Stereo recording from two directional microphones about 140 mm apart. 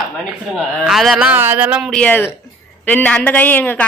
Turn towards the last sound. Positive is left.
turn(degrees=10)  # may be behind; listen again after turning